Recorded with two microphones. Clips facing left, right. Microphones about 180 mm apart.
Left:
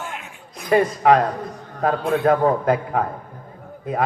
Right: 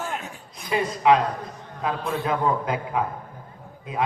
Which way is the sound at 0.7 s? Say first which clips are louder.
Left 4 dB; 50° left (ahead or behind).